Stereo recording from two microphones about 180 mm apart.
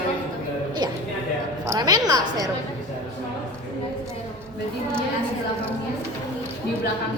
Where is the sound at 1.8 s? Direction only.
20° right (ahead or behind).